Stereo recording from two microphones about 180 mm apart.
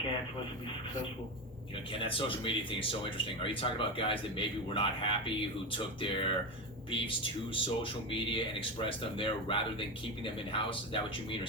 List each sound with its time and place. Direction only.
1.9 s speech: 30° left (ahead or behind)